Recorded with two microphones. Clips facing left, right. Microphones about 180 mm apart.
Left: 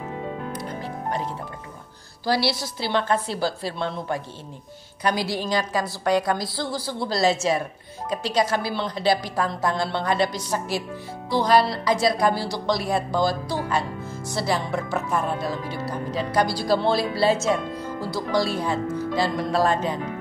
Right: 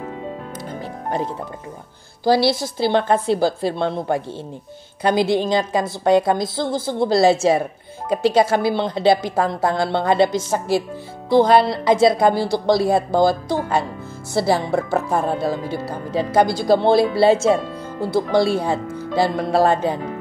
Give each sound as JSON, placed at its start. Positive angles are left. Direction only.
{"t": 2.5, "sound": "a woman's voice", "side_deg": -50}
{"t": 3.8, "sound": "a woman's voice", "side_deg": -25}
{"t": 16.4, "sound": "a woman's voice", "side_deg": -50}
{"t": 16.9, "sound": "a woman's voice", "side_deg": -25}